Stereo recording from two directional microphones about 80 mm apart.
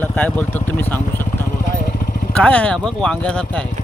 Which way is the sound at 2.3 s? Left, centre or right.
Centre.